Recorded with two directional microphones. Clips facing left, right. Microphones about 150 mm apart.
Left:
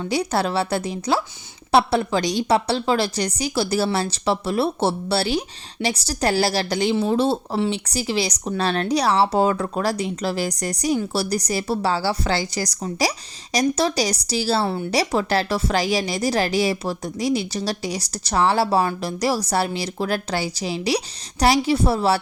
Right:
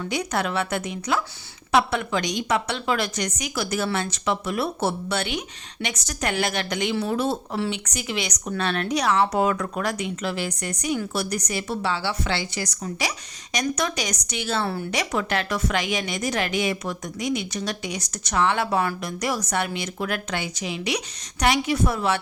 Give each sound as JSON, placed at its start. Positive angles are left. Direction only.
{"t": 0.0, "sound": "speech", "side_deg": 30}